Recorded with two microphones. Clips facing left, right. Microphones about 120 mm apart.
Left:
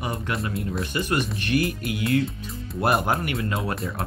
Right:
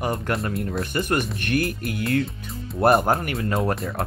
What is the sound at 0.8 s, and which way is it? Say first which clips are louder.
Speech: right 1 dB; 50° right (ahead or behind).